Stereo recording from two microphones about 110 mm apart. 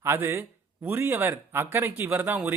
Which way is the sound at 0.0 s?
20° right (ahead or behind).